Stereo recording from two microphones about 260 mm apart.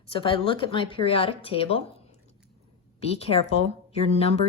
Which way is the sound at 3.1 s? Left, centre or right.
Left.